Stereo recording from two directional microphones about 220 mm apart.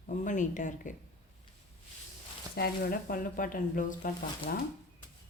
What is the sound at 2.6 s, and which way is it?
Speech, 40° left (ahead or behind).